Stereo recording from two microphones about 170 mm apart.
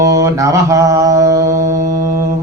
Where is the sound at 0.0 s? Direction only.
20° right (ahead or behind).